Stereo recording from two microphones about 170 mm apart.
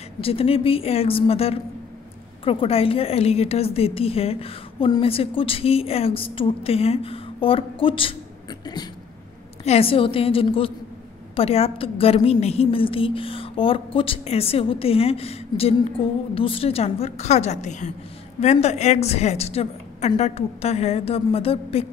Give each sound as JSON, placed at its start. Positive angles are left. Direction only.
{"t": 0.2, "sound": "a woman's voice", "side_deg": 35}
{"t": 9.7, "sound": "a woman's voice", "side_deg": 35}